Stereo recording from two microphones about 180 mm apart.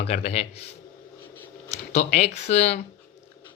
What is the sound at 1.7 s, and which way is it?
Speech, 35° left (ahead or behind).